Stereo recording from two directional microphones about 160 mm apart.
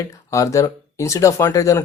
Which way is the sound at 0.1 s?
20° left (ahead or behind).